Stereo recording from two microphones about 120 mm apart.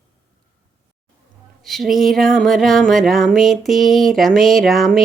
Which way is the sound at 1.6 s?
Centre (ahead or behind).